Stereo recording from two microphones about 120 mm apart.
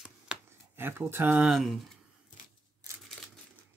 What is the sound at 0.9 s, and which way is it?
Speech, 20° right (ahead or behind).